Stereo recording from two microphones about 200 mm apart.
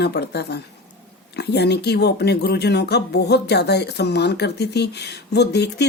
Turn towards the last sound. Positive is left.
turn(degrees=55)  # may be behind; listen again after turning